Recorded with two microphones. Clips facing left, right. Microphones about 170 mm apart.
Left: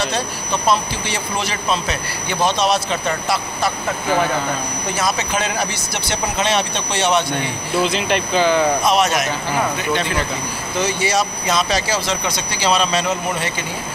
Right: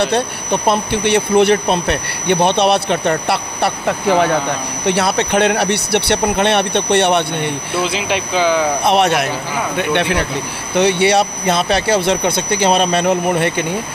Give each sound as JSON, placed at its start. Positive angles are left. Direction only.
{"t": 0.0, "sound": "speech", "side_deg": -60}
{"t": 7.9, "sound": "speech", "side_deg": -10}
{"t": 8.8, "sound": "speech", "side_deg": -60}